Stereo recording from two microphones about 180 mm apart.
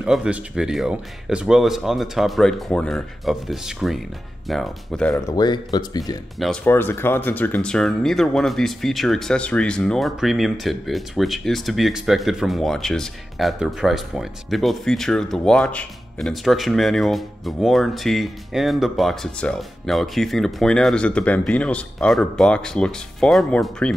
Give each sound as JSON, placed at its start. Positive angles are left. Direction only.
{"t": 0.0, "sound": "speech", "side_deg": -5}
{"t": 5.1, "sound": "speech", "side_deg": 20}
{"t": 6.3, "sound": "speech", "side_deg": 0}
{"t": 6.6, "sound": "speech", "side_deg": 10}